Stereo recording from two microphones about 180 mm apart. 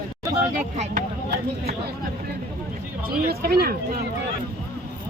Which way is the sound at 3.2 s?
55° right (ahead or behind).